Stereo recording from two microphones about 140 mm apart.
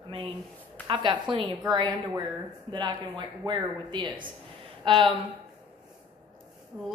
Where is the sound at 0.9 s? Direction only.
35° right (ahead or behind).